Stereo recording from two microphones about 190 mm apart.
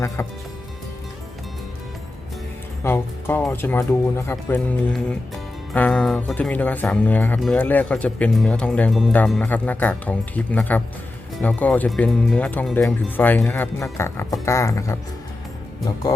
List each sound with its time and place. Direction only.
0.2 s speech: 15° left (ahead or behind)
2.8 s speech: 10° left (ahead or behind)